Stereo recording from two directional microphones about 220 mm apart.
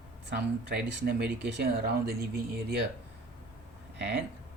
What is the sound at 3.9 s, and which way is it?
Speech, 50° right (ahead or behind).